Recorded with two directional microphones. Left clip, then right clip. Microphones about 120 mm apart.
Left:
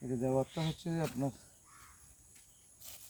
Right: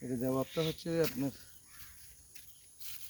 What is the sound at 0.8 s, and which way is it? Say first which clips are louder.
Speech: right 7 dB; 35° left (ahead or behind).